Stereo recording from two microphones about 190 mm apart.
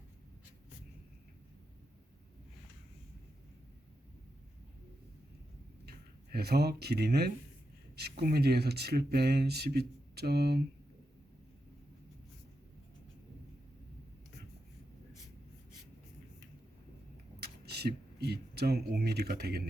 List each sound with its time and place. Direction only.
6.3 s speech: 55° right (ahead or behind)
17.4 s speech: 55° right (ahead or behind)